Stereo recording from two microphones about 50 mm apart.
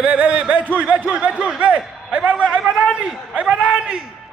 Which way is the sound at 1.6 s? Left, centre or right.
Right.